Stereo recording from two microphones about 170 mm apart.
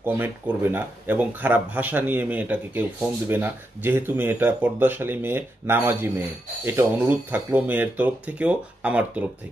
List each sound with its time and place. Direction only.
0.0 s speech: 10° right (ahead or behind)